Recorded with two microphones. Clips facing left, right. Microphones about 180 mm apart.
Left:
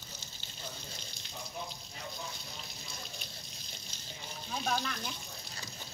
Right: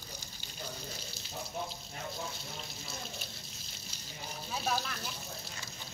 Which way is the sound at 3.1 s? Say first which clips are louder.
Right 2 dB; 5° right (ahead or behind).